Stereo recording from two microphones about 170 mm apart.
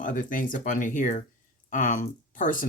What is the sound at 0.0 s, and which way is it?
Speech, 50° left (ahead or behind).